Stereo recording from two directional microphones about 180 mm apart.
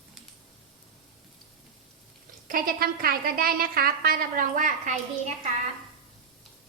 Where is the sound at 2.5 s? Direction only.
55° right (ahead or behind).